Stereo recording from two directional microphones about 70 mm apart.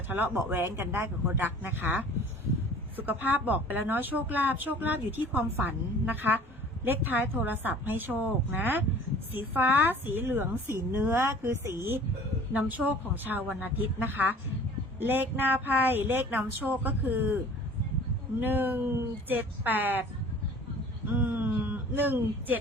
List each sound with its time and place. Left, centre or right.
0.1 s a woman's voice: right
12.5 s a woman's voice: right
21.1 s a sound: right